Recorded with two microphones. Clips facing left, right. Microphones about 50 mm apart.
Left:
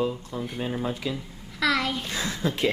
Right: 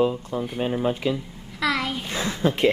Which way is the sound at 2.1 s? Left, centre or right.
Right.